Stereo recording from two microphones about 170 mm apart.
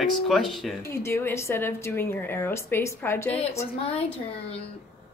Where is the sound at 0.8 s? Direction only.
15° left (ahead or behind).